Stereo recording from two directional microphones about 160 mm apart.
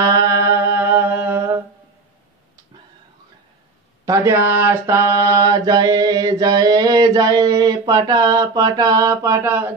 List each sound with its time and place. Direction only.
0.0 s humming: 20° right (ahead or behind)
4.0 s mantra: 20° right (ahead or behind)